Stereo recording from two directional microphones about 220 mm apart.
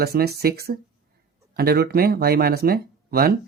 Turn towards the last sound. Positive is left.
turn(degrees=-45)  # may be behind; listen again after turning